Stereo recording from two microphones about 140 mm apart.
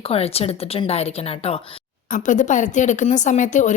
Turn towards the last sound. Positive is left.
turn(degrees=60)  # may be behind; listen again after turning